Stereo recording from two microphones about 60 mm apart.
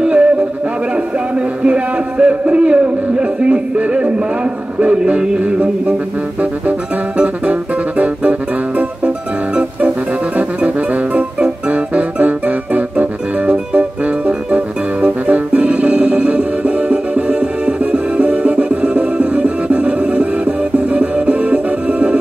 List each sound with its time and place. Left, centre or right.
0.0 s music: centre
1.6 s speech: centre
4.7 s music: centre
8.0 s music: right